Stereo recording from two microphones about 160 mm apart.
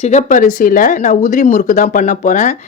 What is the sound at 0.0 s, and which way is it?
Speech, 45° left (ahead or behind).